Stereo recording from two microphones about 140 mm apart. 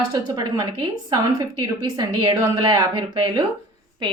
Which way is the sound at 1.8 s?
30° right (ahead or behind).